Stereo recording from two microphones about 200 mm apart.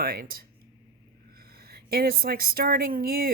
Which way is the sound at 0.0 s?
45° right (ahead or behind).